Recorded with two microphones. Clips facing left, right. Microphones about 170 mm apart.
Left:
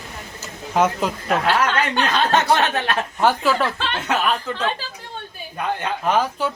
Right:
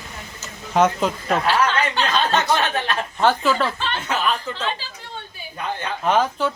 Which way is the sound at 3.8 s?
70° left (ahead or behind).